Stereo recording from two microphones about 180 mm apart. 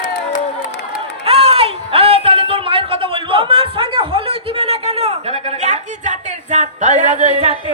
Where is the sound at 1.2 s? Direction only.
35° right (ahead or behind).